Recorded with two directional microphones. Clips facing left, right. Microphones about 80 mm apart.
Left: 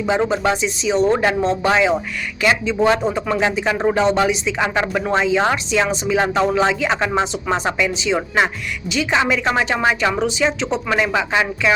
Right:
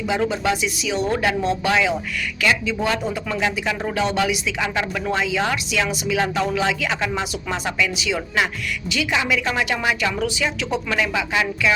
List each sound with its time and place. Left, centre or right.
0.2 s speech: left